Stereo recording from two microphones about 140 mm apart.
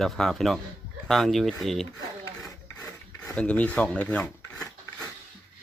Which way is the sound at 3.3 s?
10° left (ahead or behind).